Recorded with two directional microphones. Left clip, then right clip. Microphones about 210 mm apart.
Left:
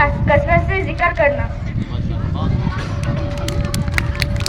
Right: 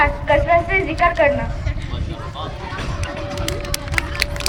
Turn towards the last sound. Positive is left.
turn(degrees=-25)  # may be behind; listen again after turning